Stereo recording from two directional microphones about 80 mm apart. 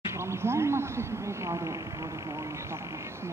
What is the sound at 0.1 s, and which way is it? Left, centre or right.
Speech, right.